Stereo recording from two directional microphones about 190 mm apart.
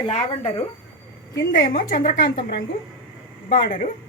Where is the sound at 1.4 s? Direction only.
45° left (ahead or behind).